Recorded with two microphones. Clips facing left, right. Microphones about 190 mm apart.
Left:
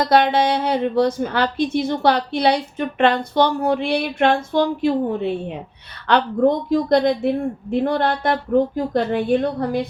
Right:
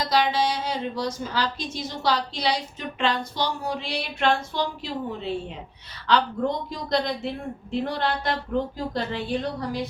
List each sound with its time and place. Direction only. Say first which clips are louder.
0.0 s a woman's voice: left 7 dB; 60° left (ahead or behind)